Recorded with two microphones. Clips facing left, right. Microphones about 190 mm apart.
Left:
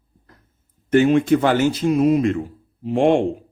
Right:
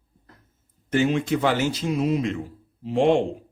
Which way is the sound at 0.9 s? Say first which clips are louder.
Left 7 dB; 55° left (ahead or behind).